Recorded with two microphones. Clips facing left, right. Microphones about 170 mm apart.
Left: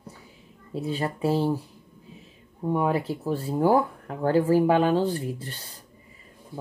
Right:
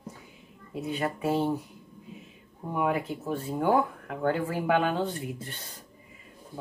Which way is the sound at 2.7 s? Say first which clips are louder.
Left 3 dB; 35° left (ahead or behind).